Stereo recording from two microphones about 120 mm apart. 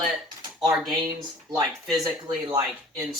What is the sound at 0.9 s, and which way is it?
Speech, 40° right (ahead or behind).